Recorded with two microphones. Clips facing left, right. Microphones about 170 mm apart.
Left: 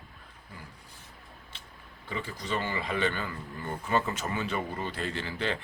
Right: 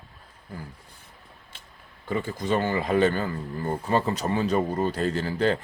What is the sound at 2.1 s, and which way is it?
Speech, 50° right (ahead or behind).